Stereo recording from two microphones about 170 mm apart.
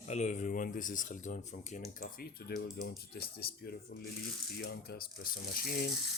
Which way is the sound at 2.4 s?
65° left (ahead or behind).